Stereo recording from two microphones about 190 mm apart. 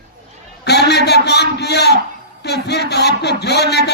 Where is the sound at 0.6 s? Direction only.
60° left (ahead or behind).